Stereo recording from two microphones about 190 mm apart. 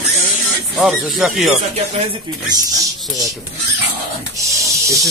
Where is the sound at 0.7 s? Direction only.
Centre (ahead or behind).